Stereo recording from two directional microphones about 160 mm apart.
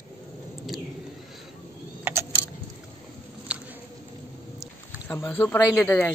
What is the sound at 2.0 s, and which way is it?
Keys jangling, 15° right (ahead or behind).